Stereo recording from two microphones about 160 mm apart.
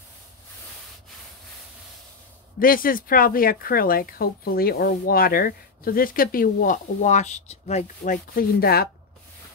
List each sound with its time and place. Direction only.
2.6 s speech: 60° left (ahead or behind)